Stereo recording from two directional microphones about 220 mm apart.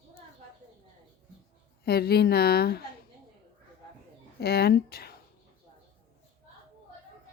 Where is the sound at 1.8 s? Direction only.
45° left (ahead or behind).